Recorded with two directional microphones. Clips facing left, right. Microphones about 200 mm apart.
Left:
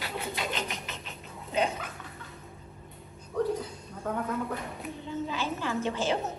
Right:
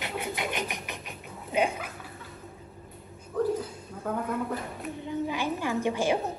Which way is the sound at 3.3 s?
Centre (ahead or behind).